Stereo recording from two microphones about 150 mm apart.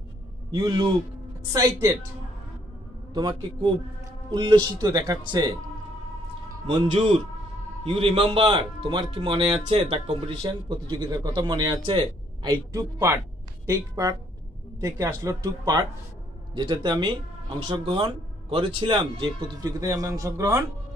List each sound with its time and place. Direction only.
0.5 s speech: 30° right (ahead or behind)
3.1 s speech: 30° right (ahead or behind)
6.8 s speech: 40° right (ahead or behind)
12.7 s speech: 20° right (ahead or behind)